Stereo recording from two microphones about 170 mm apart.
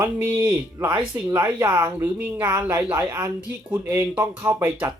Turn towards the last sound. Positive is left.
turn(degrees=-10)  # may be behind; listen again after turning